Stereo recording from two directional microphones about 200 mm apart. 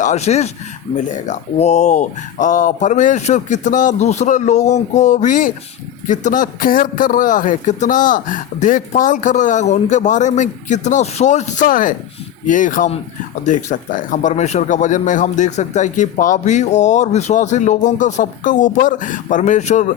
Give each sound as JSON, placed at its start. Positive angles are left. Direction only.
{"t": 0.0, "sound": "speech", "side_deg": 35}